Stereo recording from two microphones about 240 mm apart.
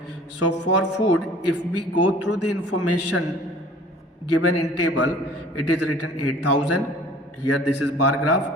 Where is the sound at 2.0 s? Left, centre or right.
Left.